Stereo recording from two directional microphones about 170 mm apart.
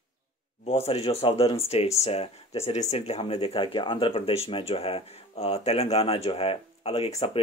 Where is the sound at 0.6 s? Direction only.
35° left (ahead or behind).